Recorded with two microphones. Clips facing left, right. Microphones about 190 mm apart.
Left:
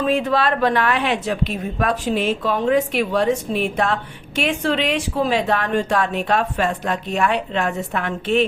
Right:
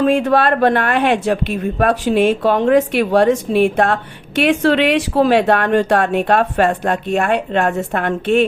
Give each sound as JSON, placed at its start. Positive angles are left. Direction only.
{"t": 0.0, "sound": "a woman's voice", "side_deg": -60}